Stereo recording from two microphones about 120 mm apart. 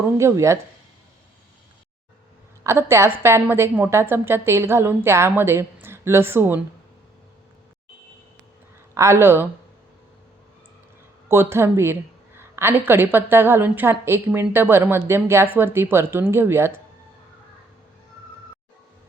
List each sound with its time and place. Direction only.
0.2 s a woman's voice: 25° right (ahead or behind)
2.6 s a woman's voice: 20° right (ahead or behind)
9.0 s a woman's voice: 20° right (ahead or behind)
11.3 s a woman's voice: 20° right (ahead or behind)